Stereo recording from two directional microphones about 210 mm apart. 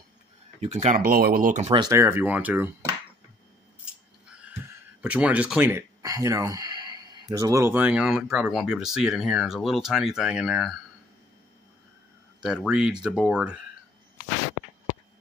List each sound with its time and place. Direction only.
0.6 s speech: 30° right (ahead or behind)
1.7 s speech: 15° right (ahead or behind)
3.8 s speech: 5° right (ahead or behind)
12.4 s speech: 5° right (ahead or behind)